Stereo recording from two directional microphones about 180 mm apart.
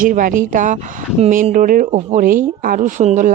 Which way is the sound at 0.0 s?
50° right (ahead or behind).